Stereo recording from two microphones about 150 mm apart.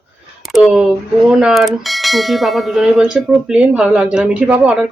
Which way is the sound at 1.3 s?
5° right (ahead or behind).